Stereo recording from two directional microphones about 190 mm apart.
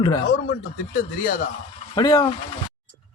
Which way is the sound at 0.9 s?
50° left (ahead or behind).